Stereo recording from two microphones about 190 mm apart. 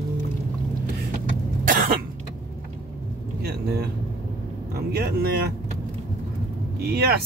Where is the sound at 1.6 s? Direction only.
45° right (ahead or behind).